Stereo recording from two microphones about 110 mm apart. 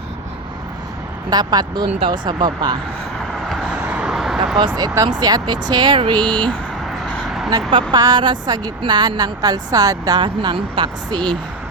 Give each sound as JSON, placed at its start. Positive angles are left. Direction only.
{"t": 1.3, "sound": "speech", "side_deg": -40}
{"t": 3.3, "sound": "vehicle", "side_deg": 0}
{"t": 3.8, "sound": "vehicle", "side_deg": -10}
{"t": 4.5, "sound": "speech", "side_deg": -40}
{"t": 7.2, "sound": "vehicle", "side_deg": 0}
{"t": 7.7, "sound": "speech", "side_deg": -50}
{"t": 7.9, "sound": "speech", "side_deg": -40}
{"t": 10.2, "sound": "speech", "side_deg": -45}